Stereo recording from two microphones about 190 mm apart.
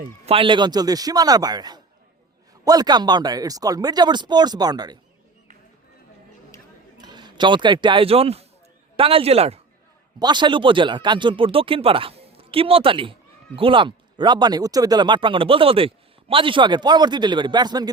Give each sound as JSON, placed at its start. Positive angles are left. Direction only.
{"t": 0.3, "sound": "speech", "side_deg": -25}
{"t": 7.0, "sound": "speech", "side_deg": -20}